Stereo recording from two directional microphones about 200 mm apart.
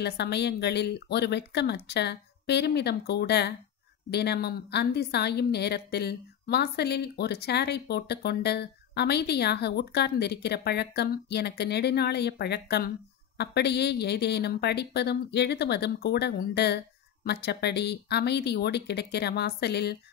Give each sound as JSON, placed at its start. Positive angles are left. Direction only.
{"t": 0.0, "sound": "a woman's voice", "side_deg": 55}